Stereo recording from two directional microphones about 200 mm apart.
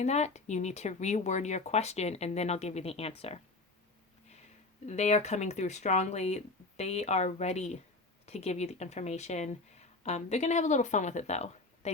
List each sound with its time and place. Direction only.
0.0 s speech: 35° left (ahead or behind)
4.9 s speech: 35° left (ahead or behind)